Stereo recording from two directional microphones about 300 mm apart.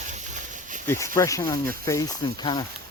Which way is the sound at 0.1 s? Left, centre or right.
Right.